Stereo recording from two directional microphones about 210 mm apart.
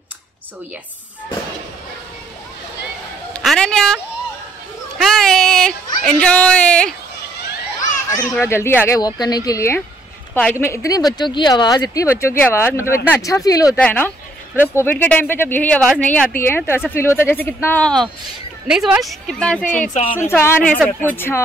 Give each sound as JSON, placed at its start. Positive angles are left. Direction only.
{"t": 3.3, "sound": "a sound", "side_deg": 5}
{"t": 6.0, "sound": "speech", "side_deg": 5}
{"t": 8.1, "sound": "speech", "side_deg": 15}
{"t": 18.7, "sound": "speech", "side_deg": -5}
{"t": 19.9, "sound": "speech", "side_deg": 25}
{"t": 20.2, "sound": "speech", "side_deg": 10}